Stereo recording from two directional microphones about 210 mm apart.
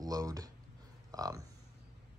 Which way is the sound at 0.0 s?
15° right (ahead or behind).